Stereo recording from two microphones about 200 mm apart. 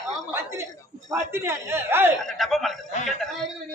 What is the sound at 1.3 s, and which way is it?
Speech, 10° right (ahead or behind).